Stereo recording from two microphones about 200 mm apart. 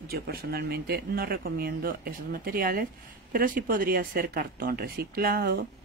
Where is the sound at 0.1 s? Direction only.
50° right (ahead or behind).